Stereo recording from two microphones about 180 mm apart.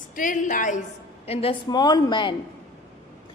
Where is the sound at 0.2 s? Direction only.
45° left (ahead or behind).